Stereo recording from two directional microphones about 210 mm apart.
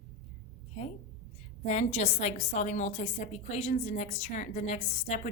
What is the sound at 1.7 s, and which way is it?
A woman's voice, 30° left (ahead or behind).